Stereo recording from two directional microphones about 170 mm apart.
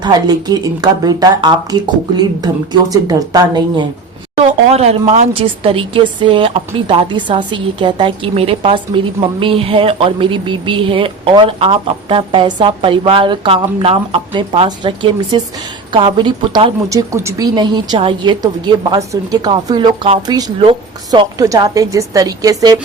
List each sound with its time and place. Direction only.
0.0 s speech: 25° right (ahead or behind)
4.4 s speech: 40° right (ahead or behind)
16.9 s speech: 15° right (ahead or behind)